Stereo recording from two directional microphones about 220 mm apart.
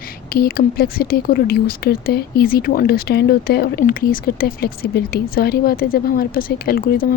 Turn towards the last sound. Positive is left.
turn(degrees=45)  # may be behind; listen again after turning